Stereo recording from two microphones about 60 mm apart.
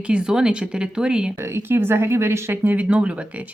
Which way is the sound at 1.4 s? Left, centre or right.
Right.